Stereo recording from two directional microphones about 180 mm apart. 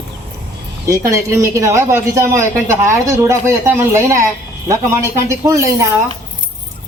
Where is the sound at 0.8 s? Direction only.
15° right (ahead or behind).